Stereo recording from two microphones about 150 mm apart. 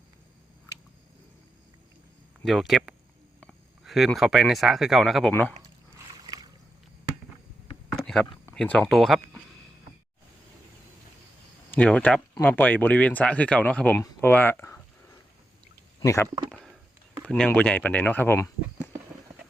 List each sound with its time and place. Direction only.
2.4 s speech: centre (ahead or behind)
5.3 s speech: 10° left (ahead or behind)
7.9 s a sound: 5° left (ahead or behind)
8.5 s speech: 10° left (ahead or behind)
11.7 s speech: 10° left (ahead or behind)
16.0 s speech: 20° left (ahead or behind)
17.2 s speech: 5° left (ahead or behind)